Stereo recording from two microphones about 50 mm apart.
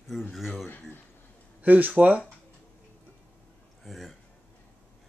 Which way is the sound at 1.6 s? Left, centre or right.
Right.